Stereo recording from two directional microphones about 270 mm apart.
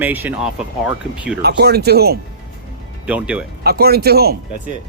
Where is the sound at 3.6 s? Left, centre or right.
Right.